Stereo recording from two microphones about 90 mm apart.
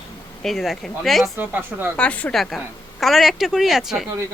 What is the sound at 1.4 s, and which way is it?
Speech, 20° right (ahead or behind).